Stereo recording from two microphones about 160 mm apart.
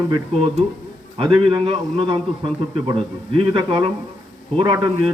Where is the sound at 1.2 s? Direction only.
30° right (ahead or behind).